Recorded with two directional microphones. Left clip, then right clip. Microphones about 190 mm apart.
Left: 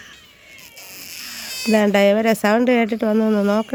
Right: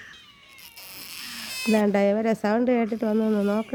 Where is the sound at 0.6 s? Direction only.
60° right (ahead or behind).